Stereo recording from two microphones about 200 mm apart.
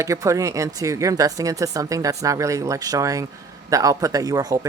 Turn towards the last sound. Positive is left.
turn(degrees=-15)  # may be behind; listen again after turning